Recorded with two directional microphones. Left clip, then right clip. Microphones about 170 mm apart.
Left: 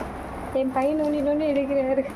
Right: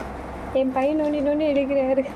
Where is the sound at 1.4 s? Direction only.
10° right (ahead or behind).